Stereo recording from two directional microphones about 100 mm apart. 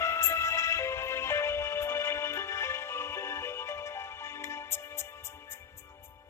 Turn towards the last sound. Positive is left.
turn(degrees=25)  # may be behind; listen again after turning